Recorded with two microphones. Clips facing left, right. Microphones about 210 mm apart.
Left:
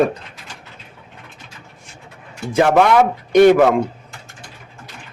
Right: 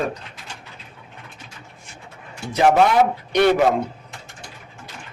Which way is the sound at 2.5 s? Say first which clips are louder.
Left 3 dB; 65° left (ahead or behind).